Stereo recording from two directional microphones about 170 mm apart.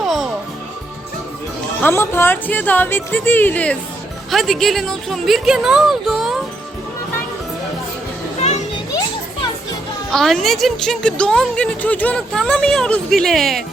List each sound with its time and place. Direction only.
0.0 s music: centre (ahead or behind)
1.8 s speech: 15° left (ahead or behind); by 6.4 s centre (ahead or behind)
8.4 s children playing: 40° left (ahead or behind)
10.1 s speech: centre (ahead or behind)